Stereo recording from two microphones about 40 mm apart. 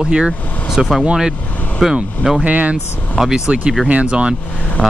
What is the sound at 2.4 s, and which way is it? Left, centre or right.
Speech, right.